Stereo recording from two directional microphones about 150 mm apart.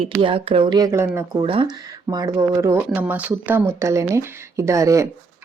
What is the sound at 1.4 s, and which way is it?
Speech, 35° right (ahead or behind).